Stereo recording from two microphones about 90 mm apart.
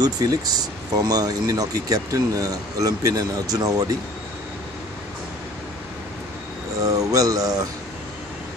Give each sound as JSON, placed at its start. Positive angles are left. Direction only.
{"t": 0.0, "sound": "speech", "side_deg": -45}
{"t": 6.8, "sound": "speech", "side_deg": -40}